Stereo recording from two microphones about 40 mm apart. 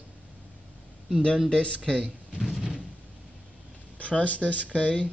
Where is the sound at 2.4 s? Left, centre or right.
Centre.